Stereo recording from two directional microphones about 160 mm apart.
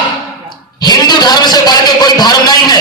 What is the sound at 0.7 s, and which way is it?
A man's voice, 25° left (ahead or behind).